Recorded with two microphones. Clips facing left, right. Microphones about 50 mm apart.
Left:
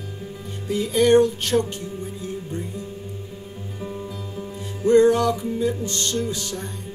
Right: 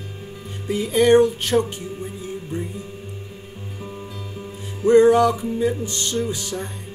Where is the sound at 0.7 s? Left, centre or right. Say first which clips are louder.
Right 1 dB; centre.